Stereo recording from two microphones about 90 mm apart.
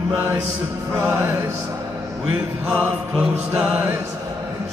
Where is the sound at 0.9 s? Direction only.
25° right (ahead or behind).